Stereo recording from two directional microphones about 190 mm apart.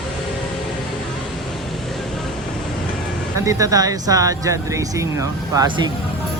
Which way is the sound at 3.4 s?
20° right (ahead or behind).